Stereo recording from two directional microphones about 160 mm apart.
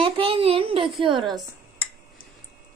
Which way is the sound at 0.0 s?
35° right (ahead or behind).